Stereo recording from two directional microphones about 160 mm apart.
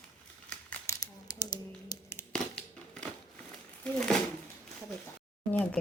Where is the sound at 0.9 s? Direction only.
25° left (ahead or behind).